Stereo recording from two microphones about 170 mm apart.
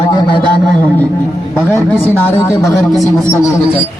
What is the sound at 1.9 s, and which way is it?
Speech, 10° left (ahead or behind).